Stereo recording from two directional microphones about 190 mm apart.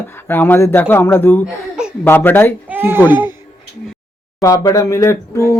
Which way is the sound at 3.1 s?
10° right (ahead or behind).